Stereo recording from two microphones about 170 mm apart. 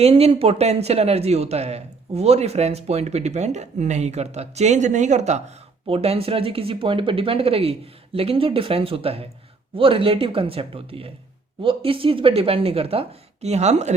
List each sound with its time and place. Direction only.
0.0 s speech: 35° right (ahead or behind)